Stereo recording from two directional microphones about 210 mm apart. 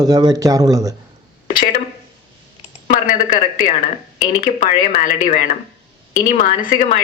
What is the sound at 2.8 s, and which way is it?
Speech, 40° left (ahead or behind).